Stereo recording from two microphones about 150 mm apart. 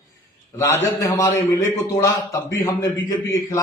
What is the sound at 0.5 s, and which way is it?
A man's voice, 20° left (ahead or behind).